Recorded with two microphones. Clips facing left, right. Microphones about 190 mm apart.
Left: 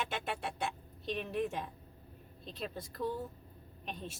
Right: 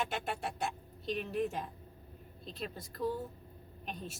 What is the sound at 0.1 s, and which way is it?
Speech, 45° right (ahead or behind).